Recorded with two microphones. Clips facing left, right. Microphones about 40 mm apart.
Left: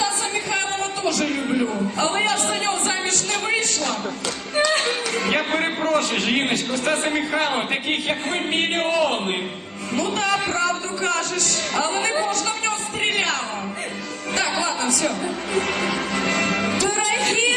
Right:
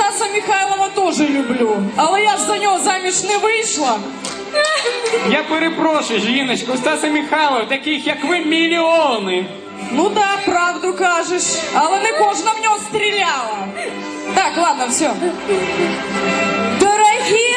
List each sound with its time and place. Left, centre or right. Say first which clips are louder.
0.0 s music: right 7 dB; right
2.0 s a man's voice: right 7 dB; right
5.1 s a man's voice: right 6 dB; right
7.5 s speech: right 6 dB; right
8.0 s a man's voice: right 7 dB; right
9.9 s music: right 7 dB; right
10.6 s a man's voice: right 7 dB; right
14.3 s a man's voice: right 8 dB; right
16.1 s music: right 5 dB; right